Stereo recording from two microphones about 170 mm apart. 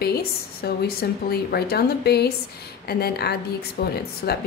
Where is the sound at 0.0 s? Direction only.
65° left (ahead or behind).